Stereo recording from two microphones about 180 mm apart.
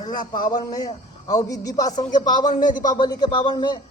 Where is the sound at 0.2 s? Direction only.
50° left (ahead or behind).